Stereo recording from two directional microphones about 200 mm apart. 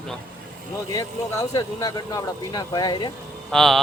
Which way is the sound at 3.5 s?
Centre (ahead or behind).